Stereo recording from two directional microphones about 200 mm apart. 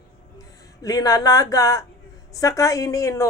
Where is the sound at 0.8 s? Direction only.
15° left (ahead or behind).